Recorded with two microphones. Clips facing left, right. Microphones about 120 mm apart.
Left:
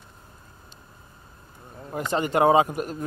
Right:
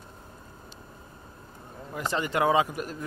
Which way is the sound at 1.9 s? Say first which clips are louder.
Left 4 dB; 45° left (ahead or behind).